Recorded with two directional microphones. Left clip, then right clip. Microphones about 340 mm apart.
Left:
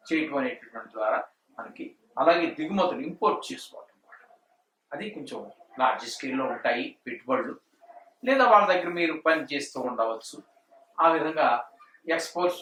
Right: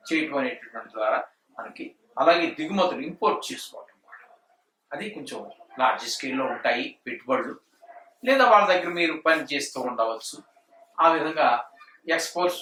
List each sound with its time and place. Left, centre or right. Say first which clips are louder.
0.0 s speech: right 2 dB; centre
4.9 s speech: right 2 dB; centre